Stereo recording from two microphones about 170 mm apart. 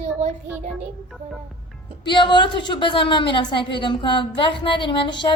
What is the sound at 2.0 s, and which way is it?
A woman's voice, 25° left (ahead or behind).